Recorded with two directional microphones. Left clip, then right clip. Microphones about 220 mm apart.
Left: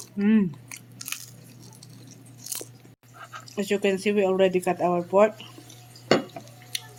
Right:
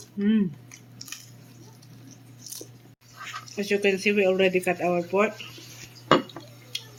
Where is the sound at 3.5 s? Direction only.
40° left (ahead or behind).